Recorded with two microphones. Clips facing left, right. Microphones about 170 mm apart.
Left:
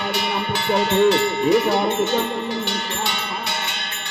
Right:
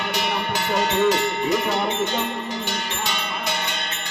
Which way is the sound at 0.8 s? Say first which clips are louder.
Left 3 dB; 45° right (ahead or behind).